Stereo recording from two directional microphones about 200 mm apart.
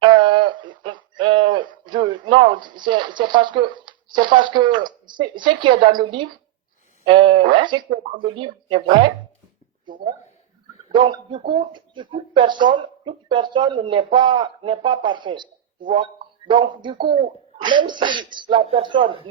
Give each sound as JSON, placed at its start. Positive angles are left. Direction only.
{"t": 0.0, "sound": "a sound", "side_deg": -25}
{"t": 5.4, "sound": "speech", "side_deg": -25}
{"t": 7.1, "sound": "speech", "side_deg": -25}
{"t": 10.9, "sound": "speech", "side_deg": -25}
{"t": 16.5, "sound": "speech", "side_deg": -25}